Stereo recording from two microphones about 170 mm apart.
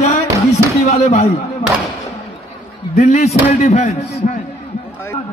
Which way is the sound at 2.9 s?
40° left (ahead or behind).